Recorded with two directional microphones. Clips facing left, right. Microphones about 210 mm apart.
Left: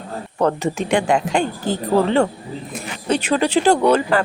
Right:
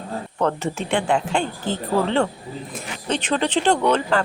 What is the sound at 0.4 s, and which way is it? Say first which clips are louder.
Speech: left 4 dB; 15° left (ahead or behind).